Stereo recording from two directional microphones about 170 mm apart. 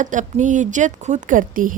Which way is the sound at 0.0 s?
45° right (ahead or behind).